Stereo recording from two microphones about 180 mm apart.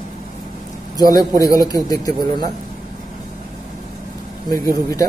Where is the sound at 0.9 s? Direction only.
20° left (ahead or behind).